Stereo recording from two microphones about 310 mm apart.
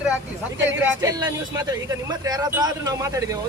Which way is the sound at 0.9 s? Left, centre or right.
Centre.